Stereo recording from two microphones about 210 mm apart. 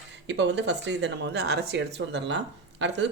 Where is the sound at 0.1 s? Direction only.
60° right (ahead or behind).